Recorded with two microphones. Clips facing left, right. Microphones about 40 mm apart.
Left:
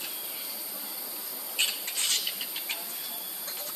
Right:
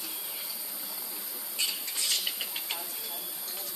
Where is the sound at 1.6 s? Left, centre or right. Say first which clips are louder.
Left 4 dB; left.